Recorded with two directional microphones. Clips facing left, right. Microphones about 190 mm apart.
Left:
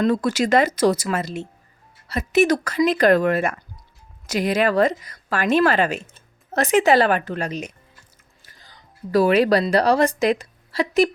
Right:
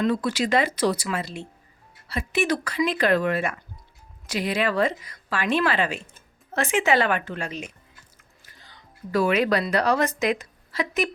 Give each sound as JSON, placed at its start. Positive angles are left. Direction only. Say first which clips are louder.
{"t": 0.0, "sound": "a woman's voice", "louder": "left 4 dB", "side_deg": 45}